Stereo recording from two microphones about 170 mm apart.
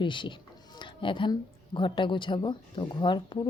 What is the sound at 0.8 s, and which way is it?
Music, 30° left (ahead or behind).